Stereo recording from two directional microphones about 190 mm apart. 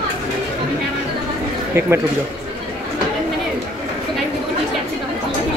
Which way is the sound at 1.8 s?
15° right (ahead or behind).